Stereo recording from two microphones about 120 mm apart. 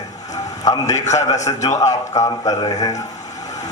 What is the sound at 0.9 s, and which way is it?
Speech, 75° left (ahead or behind).